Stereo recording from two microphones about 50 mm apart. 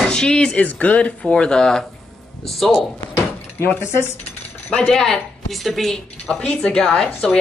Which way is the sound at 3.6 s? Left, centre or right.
Left.